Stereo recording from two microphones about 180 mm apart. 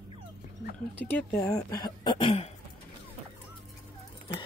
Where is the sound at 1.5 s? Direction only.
20° left (ahead or behind).